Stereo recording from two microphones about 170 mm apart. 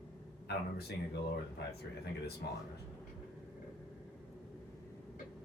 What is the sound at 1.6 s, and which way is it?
Speech, 80° left.